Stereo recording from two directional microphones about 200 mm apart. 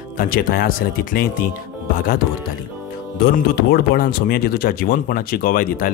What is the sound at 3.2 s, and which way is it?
Speech, 50° left (ahead or behind).